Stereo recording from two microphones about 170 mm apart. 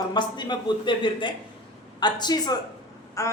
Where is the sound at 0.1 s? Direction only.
25° left (ahead or behind).